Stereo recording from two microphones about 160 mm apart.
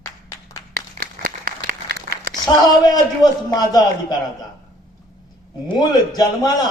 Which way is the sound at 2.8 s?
25° left (ahead or behind).